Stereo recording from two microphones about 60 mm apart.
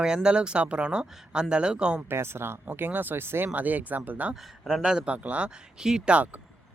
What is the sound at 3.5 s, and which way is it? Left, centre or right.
Speech, right.